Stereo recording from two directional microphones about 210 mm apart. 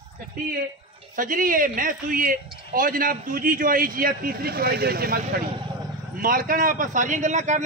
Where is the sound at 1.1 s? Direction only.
40° right (ahead or behind).